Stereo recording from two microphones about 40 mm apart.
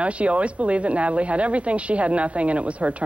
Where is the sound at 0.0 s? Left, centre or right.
Right.